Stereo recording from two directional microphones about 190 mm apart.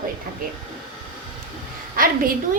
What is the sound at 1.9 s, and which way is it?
Speech, 50° right (ahead or behind).